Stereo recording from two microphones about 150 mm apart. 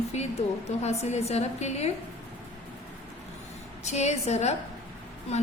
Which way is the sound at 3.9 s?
50° left (ahead or behind).